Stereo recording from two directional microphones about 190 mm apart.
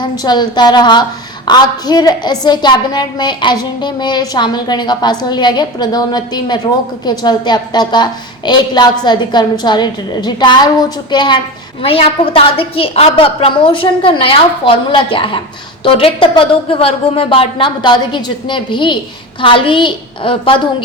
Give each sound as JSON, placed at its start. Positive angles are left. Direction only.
{"t": 0.0, "sound": "a woman's voice", "side_deg": 20}